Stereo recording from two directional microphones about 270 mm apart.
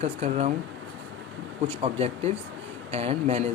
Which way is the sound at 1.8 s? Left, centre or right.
Right.